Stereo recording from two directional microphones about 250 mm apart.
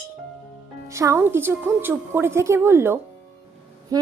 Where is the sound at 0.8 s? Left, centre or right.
Centre.